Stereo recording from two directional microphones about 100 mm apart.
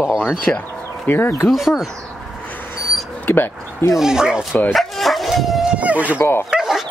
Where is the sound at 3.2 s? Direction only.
20° left (ahead or behind).